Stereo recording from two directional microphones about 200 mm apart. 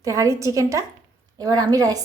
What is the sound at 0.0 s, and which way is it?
A woman's voice, 15° right (ahead or behind).